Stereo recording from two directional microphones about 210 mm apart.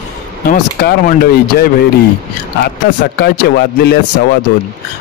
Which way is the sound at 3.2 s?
50° left (ahead or behind).